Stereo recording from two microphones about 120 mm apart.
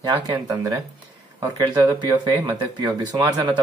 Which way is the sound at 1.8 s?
30° right (ahead or behind).